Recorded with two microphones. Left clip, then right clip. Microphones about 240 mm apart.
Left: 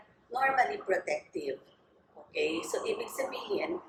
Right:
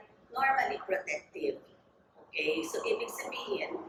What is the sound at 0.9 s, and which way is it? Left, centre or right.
A woman's voice, left.